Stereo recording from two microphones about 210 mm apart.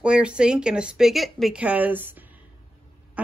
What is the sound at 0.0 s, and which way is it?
Speech, 5° right (ahead or behind).